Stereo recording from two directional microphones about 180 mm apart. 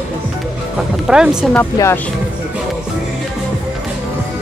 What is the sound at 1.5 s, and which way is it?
Speech, 10° left (ahead or behind).